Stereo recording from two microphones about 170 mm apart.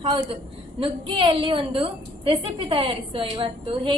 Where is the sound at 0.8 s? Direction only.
30° right (ahead or behind).